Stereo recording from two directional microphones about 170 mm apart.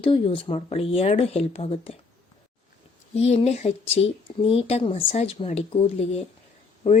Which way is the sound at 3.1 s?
40° left (ahead or behind).